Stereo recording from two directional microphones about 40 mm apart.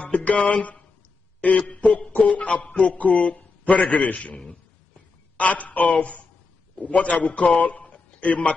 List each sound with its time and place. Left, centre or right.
0.2 s speech: left
1.4 s music: left
5.4 s music: left
6.8 s a man's voice: left